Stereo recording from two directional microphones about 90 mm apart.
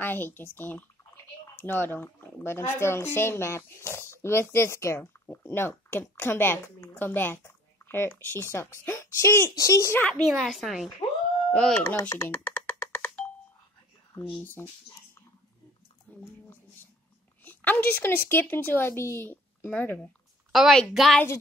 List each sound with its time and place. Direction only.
0.0 s a child's voice: 20° left (ahead or behind)
9.9 s a child's voice: 10° left (ahead or behind)
10.2 s speech: centre (ahead or behind)
12.0 s a child's voice: 35° left (ahead or behind)
12.3 s music: 20° left (ahead or behind)
14.4 s speech: 20° left (ahead or behind)
17.5 s speech: 20° left (ahead or behind)
20.5 s speech: 5° right (ahead or behind)